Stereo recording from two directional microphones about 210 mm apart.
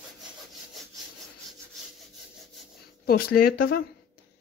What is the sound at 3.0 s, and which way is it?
Speech, 45° left (ahead or behind).